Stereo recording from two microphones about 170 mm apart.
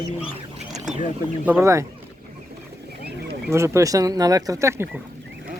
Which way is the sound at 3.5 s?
15° right (ahead or behind).